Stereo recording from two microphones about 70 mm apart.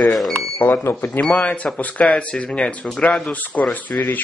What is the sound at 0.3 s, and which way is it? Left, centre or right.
Cash register, left.